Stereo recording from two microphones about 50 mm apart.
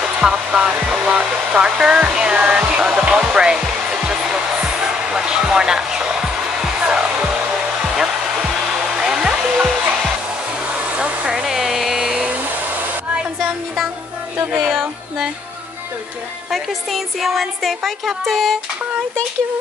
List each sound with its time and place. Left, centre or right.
0.0 s hair dryer: centre
0.8 s speech: centre
3.3 s hair dryer: centre
4.8 s music: centre
6.8 s hair dryer: right
7.8 s hair dryer: centre
8.9 s music: centre
11.0 s hair dryer: centre
11.4 s a sound: centre
14.7 s music: centre
16.4 s a woman's voice: centre